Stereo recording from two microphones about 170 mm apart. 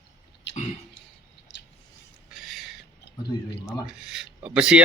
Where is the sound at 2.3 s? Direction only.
Centre (ahead or behind).